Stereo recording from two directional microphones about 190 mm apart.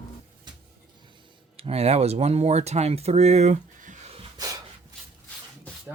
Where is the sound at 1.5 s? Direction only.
30° right (ahead or behind).